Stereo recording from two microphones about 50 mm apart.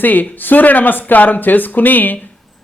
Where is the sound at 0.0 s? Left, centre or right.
Left.